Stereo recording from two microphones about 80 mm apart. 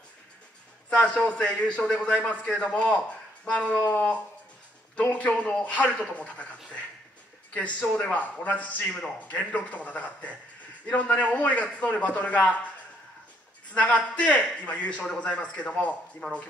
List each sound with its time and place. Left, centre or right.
0.8 s a man's voice: centre
13.7 s speech: centre